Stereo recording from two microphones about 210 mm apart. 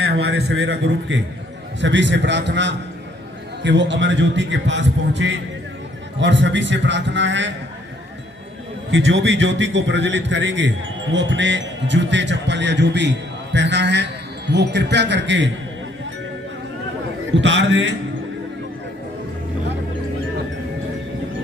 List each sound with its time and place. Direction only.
0.0 s speech: 50° right (ahead or behind)
8.9 s speech: 60° right (ahead or behind)
17.3 s speech: 60° right (ahead or behind)